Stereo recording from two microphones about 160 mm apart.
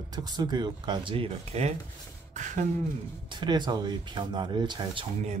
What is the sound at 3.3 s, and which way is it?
Speech, 30° right (ahead or behind).